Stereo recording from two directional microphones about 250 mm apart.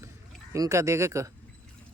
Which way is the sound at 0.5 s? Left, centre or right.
Centre.